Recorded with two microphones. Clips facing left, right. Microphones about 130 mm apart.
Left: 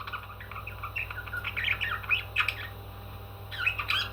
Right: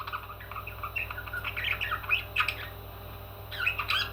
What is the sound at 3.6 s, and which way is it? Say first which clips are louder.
Squawk: right 1 dB; 25° right (ahead or behind).